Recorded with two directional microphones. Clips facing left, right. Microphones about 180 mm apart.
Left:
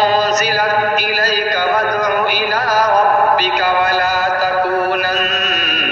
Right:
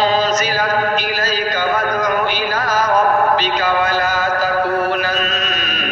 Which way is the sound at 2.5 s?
35° left (ahead or behind).